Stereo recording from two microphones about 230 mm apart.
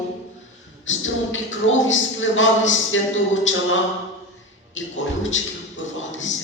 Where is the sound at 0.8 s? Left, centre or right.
Left.